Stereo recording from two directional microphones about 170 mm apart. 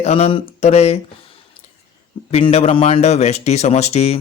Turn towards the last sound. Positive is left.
turn(degrees=40)  # may be behind; listen again after turning